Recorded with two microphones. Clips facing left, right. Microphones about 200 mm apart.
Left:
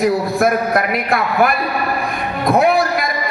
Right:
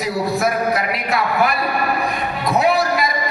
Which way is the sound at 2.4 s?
50° left (ahead or behind).